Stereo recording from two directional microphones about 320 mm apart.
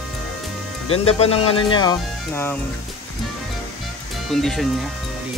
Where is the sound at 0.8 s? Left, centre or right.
Centre.